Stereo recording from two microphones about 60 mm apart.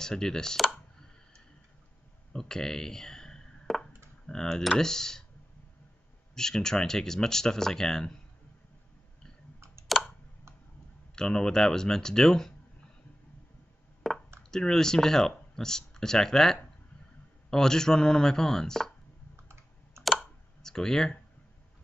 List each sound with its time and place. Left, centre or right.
0.0 s speech: centre
2.3 s speech: centre
3.6 s a sound: centre
4.3 s speech: centre
6.3 s speech: centre
9.9 s a sound: centre
11.1 s speech: centre
14.0 s a sound: centre
14.5 s speech: centre
19.3 s typing: right
20.0 s computer keyboard: centre